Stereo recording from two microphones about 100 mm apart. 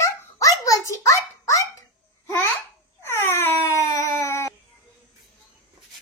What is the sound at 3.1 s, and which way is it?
Wail, 25° left (ahead or behind).